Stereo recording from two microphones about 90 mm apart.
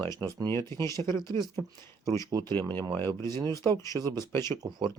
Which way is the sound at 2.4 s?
25° left (ahead or behind).